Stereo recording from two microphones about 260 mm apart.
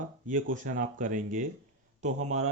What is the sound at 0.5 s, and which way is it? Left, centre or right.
Speech, right.